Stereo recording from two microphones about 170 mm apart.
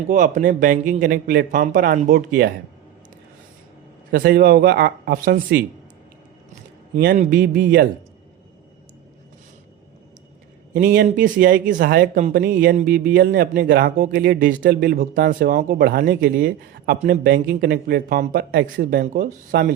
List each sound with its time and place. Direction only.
0.1 s speech: 50° right (ahead or behind)
1.5 s speech: 50° right (ahead or behind)
4.1 s speech: 65° right (ahead or behind)
6.9 s speech: 55° right (ahead or behind)
10.8 s speech: 60° right (ahead or behind)
17.1 s speech: 85° right; by 19.7 s 60° right (ahead or behind)